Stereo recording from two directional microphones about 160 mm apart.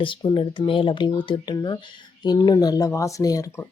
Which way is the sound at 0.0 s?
30° left (ahead or behind).